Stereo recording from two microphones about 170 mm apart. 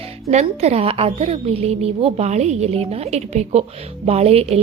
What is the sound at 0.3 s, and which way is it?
A woman's voice, 40° right (ahead or behind).